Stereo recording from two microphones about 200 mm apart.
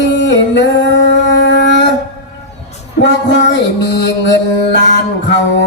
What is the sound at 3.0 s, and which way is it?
Mantra, 60° left (ahead or behind).